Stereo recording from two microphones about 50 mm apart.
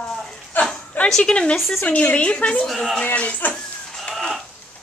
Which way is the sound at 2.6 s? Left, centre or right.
Centre.